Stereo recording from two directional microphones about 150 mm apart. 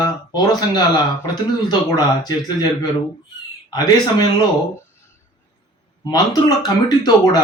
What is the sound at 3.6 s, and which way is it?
Speech, 25° left (ahead or behind).